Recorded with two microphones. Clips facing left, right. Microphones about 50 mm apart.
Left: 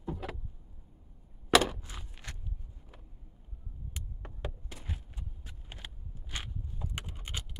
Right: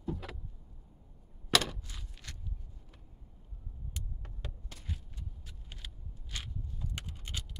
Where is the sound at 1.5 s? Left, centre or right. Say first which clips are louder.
Left 5 dB; centre.